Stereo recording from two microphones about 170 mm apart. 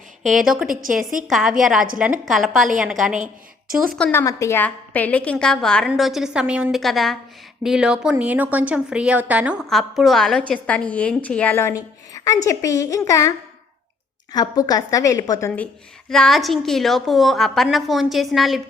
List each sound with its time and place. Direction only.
0.2 s a woman's voice: centre (ahead or behind)
0.7 s a woman's voice: 55° right (ahead or behind)
1.3 s a woman's voice: centre (ahead or behind)
3.9 s a woman's voice: 5° left (ahead or behind)
4.2 s a woman's voice: 15° left (ahead or behind)
14.3 s a woman's voice: 20° left (ahead or behind); by 18.6 s centre (ahead or behind)